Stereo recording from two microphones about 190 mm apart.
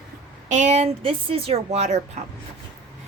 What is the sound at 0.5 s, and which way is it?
Speech, 40° right (ahead or behind).